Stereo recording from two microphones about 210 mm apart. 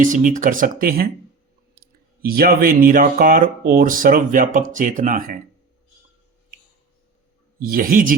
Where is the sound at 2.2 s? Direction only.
45° right (ahead or behind).